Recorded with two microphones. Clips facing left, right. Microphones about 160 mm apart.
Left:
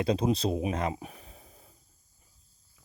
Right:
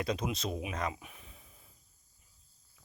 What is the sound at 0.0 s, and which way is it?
Speech, 30° left (ahead or behind).